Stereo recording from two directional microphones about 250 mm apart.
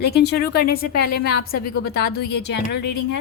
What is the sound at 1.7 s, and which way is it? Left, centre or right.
A woman's voice, left.